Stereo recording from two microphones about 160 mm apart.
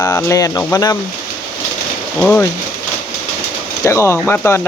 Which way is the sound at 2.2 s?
10° left (ahead or behind).